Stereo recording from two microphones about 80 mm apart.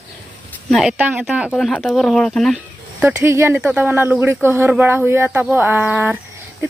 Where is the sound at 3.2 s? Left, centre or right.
Right.